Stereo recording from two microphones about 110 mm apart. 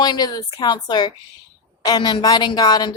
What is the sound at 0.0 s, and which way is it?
Speech, 35° left (ahead or behind).